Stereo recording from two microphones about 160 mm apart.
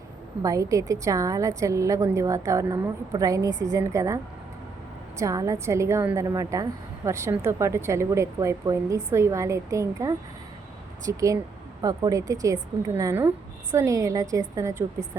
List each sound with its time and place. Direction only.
0.4 s a woman's voice: 20° right (ahead or behind)